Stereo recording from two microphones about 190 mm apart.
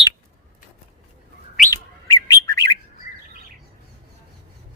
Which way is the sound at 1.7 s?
20° left (ahead or behind).